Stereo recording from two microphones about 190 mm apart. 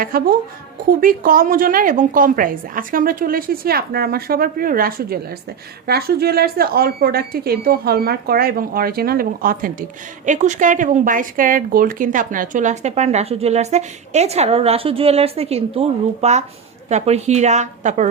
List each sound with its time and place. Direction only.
0.0 s a woman's voice: 50° right (ahead or behind)